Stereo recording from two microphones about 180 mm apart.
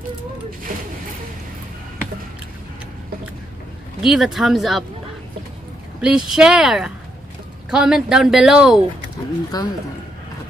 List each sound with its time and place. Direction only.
4.0 s speech: centre (ahead or behind)
5.9 s speech: 5° right (ahead or behind)
9.5 s speech: 20° left (ahead or behind)